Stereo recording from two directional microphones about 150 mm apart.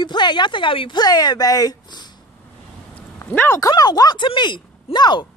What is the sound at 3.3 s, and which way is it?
Speech, 15° left (ahead or behind).